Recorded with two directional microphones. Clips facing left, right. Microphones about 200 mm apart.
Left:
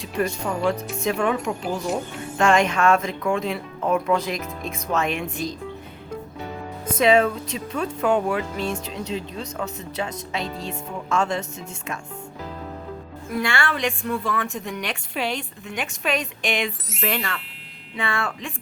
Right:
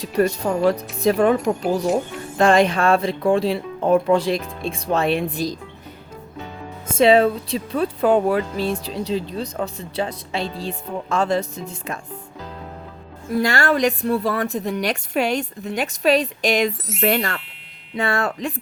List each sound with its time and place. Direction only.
0.0 s speech: 35° right (ahead or behind)
1.5 s speech: 50° right (ahead or behind)
2.4 s speech: 35° right (ahead or behind)
6.8 s speech: 30° right (ahead or behind)
13.3 s speech: 40° right (ahead or behind)